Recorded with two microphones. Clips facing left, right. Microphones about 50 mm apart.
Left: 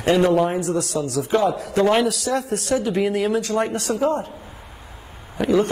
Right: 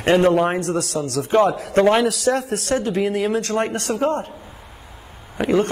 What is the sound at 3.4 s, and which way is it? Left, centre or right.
Speech, right.